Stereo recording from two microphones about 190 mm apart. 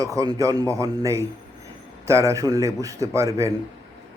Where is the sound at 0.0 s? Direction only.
20° right (ahead or behind).